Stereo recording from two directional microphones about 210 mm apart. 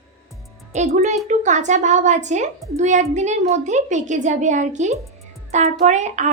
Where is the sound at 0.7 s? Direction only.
35° right (ahead or behind).